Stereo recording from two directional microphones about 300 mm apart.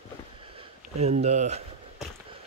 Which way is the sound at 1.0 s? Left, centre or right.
Right.